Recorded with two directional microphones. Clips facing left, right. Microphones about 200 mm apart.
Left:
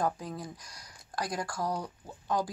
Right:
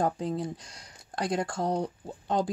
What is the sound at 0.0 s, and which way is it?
Speech, 25° right (ahead or behind).